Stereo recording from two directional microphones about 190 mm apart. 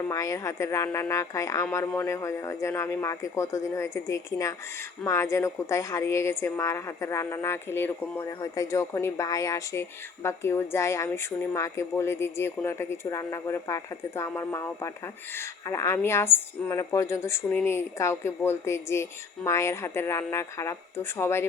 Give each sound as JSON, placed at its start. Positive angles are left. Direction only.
{"t": 0.0, "sound": "a woman's voice", "side_deg": 15}